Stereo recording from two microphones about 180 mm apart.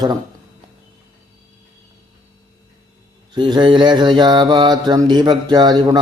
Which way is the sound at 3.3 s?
25° right (ahead or behind).